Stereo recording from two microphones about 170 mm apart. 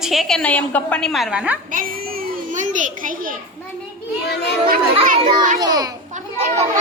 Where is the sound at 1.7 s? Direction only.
55° right (ahead or behind).